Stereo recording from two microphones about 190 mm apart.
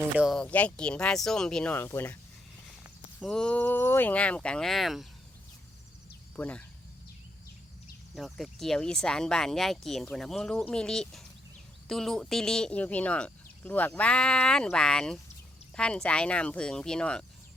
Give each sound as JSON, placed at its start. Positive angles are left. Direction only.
{"t": 0.2, "sound": "speech", "side_deg": 0}
{"t": 2.8, "sound": "speech", "side_deg": 0}
{"t": 6.3, "sound": "speech", "side_deg": 10}
{"t": 8.1, "sound": "speech", "side_deg": 0}